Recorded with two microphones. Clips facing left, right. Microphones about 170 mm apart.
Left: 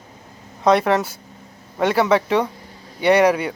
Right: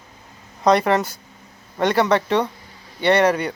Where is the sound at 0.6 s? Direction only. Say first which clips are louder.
Even; centre (ahead or behind).